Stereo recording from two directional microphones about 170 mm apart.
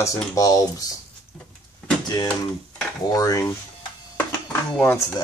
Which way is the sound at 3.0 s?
20° left (ahead or behind).